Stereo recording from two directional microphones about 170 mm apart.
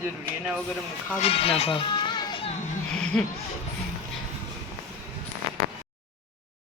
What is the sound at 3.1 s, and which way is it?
Speech, 5° left (ahead or behind).